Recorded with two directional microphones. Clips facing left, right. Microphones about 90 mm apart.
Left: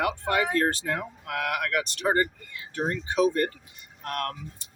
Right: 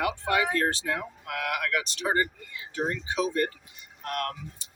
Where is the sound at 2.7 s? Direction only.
50° left (ahead or behind).